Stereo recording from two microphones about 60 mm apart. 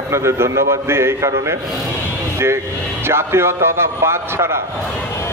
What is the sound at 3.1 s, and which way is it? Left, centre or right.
A man's voice, right.